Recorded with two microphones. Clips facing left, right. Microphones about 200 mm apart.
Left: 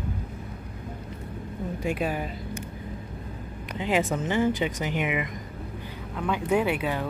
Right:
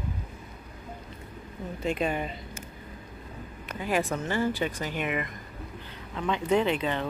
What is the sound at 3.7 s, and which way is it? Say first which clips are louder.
A woman's voice: left 3 dB; 20° left (ahead or behind).